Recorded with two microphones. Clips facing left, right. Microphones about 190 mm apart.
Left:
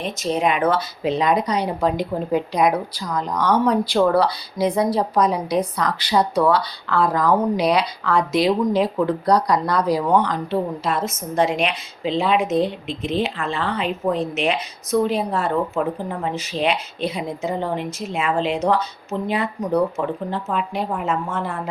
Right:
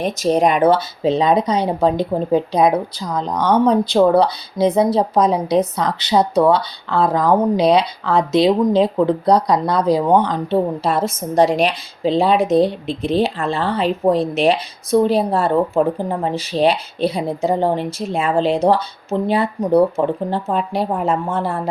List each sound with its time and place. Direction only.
0.0 s speech: 40° right (ahead or behind)